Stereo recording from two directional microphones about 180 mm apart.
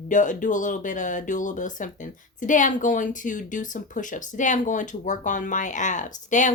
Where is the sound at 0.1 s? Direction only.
45° left (ahead or behind).